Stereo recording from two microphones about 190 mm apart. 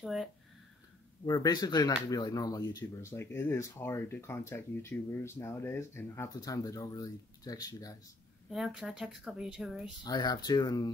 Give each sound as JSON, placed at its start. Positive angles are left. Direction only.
{"t": 0.0, "sound": "a woman's voice", "side_deg": 0}
{"t": 1.2, "sound": "speech", "side_deg": 20}
{"t": 8.5, "sound": "a woman's voice", "side_deg": 0}
{"t": 10.0, "sound": "speech", "side_deg": 20}